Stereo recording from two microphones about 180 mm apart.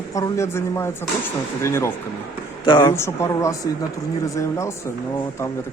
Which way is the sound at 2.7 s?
25° left (ahead or behind).